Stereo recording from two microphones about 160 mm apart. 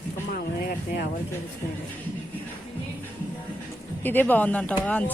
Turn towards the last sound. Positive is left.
turn(degrees=10)  # may be behind; listen again after turning